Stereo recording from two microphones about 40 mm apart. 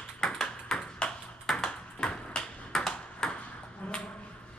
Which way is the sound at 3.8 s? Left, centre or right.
Left.